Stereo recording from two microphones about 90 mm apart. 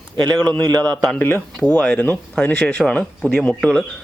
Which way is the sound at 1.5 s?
5° left (ahead or behind).